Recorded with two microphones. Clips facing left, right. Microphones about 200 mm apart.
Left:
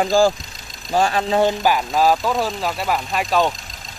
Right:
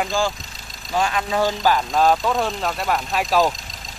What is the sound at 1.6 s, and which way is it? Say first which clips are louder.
Speech: left 1 dB; 10° left (ahead or behind).